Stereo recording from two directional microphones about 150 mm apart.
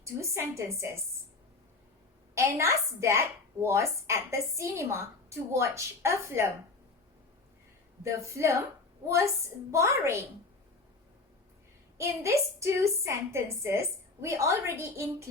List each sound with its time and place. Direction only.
0.0 s a woman's voice: 20° right (ahead or behind)
2.3 s a woman's voice: 20° right (ahead or behind)
8.0 s a woman's voice: 20° right (ahead or behind)
11.9 s a woman's voice: 20° right (ahead or behind)